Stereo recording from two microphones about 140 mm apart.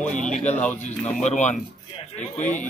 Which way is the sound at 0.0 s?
60° left (ahead or behind).